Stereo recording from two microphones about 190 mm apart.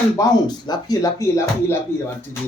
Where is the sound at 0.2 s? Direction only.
20° left (ahead or behind).